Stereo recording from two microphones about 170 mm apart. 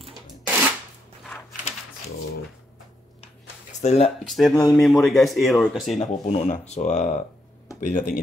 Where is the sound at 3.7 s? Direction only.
40° left (ahead or behind).